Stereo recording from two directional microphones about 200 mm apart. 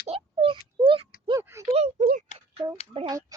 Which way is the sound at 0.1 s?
30° right (ahead or behind).